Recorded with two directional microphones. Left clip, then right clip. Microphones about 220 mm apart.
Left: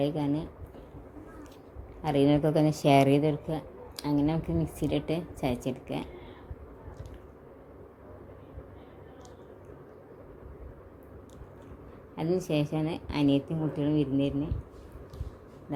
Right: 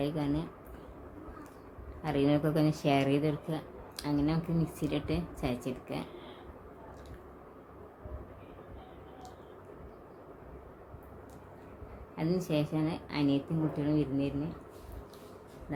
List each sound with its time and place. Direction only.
0.0 s a woman's voice: 10° left (ahead or behind)
2.0 s a woman's voice: 15° left (ahead or behind)
12.1 s a woman's voice: 15° left (ahead or behind)